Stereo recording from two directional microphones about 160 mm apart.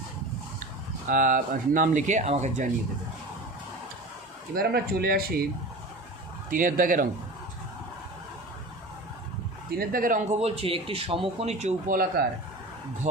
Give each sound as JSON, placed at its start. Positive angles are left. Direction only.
{"t": 1.0, "sound": "speech", "side_deg": -55}
{"t": 4.5, "sound": "speech", "side_deg": -75}
{"t": 6.5, "sound": "speech", "side_deg": -60}
{"t": 9.7, "sound": "speech", "side_deg": -60}
{"t": 10.3, "sound": "speech", "side_deg": -40}